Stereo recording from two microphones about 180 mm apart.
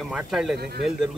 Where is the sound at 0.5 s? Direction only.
65° right (ahead or behind).